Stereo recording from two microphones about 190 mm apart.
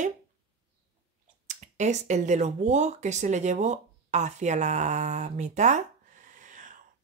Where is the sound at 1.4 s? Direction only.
40° right (ahead or behind).